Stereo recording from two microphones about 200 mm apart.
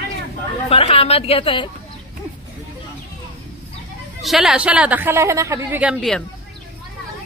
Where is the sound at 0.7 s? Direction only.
30° left (ahead or behind).